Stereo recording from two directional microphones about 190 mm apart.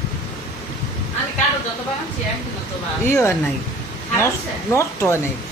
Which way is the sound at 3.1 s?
15° left (ahead or behind).